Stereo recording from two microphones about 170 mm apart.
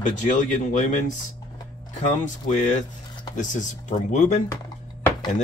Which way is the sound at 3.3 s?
45° left (ahead or behind).